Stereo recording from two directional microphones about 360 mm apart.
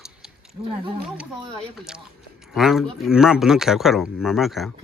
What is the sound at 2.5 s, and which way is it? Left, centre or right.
Speech, centre.